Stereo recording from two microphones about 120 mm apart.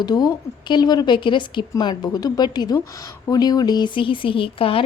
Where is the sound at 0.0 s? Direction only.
35° left (ahead or behind).